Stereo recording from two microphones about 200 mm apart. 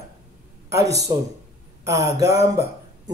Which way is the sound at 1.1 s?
15° right (ahead or behind).